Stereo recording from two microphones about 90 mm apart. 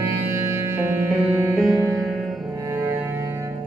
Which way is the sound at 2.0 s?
Centre (ahead or behind).